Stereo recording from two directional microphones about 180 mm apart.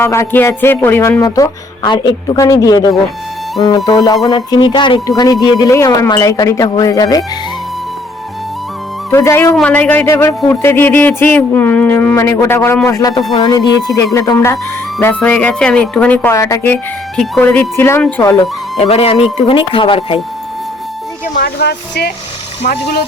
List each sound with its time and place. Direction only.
0.0 s speech: 15° left (ahead or behind)
9.0 s speech: 15° left (ahead or behind)
18.8 s speech: 35° left (ahead or behind)
21.3 s speech: 65° left (ahead or behind)
22.6 s speech: 45° left (ahead or behind)